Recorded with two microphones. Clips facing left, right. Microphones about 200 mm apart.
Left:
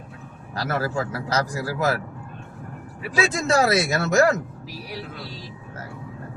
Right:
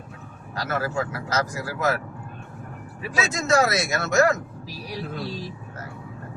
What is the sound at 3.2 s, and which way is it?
Speech, 30° left (ahead or behind).